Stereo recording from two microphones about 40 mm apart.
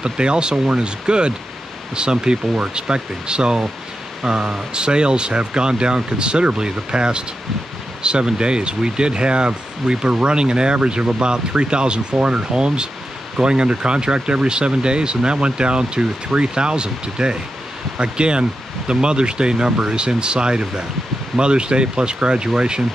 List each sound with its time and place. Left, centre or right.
0.0 s speech: right